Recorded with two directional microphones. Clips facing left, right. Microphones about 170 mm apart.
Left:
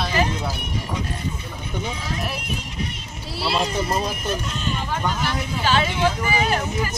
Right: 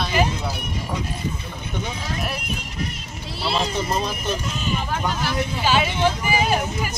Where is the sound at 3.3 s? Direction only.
5° left (ahead or behind).